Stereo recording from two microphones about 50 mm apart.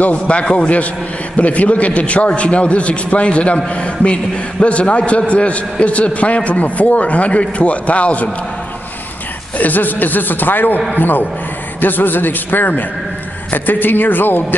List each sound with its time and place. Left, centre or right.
0.0 s a man's voice: left
9.6 s a man's voice: left